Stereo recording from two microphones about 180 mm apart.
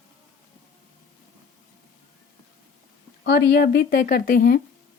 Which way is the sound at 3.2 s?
65° left (ahead or behind).